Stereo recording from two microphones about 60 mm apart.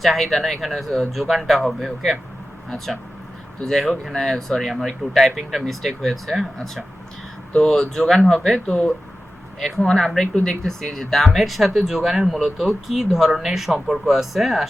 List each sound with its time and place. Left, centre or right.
0.0 s speech: centre
7.5 s speech: centre
8.6 s speech: left
9.6 s speech: centre